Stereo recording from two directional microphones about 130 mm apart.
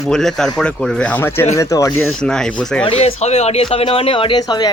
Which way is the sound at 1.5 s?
25° left (ahead or behind).